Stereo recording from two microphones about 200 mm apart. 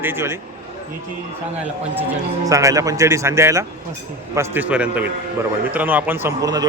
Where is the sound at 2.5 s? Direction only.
15° right (ahead or behind).